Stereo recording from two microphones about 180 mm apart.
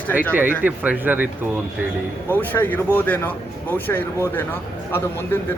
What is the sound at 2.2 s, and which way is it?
Speech, 10° left (ahead or behind).